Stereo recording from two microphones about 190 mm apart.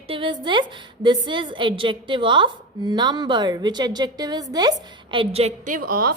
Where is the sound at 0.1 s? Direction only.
25° right (ahead or behind).